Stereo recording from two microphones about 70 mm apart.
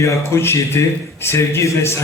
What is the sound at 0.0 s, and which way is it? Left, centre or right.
A man's voice, left.